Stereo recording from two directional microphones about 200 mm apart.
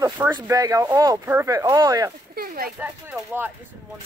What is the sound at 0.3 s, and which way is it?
Speech, 15° right (ahead or behind).